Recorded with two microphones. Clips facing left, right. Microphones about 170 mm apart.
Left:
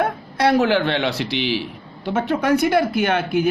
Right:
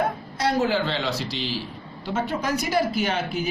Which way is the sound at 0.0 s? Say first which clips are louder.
Left 5 dB; 65° left (ahead or behind).